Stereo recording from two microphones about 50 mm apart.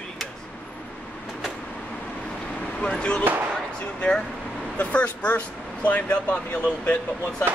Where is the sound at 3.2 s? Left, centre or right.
Right.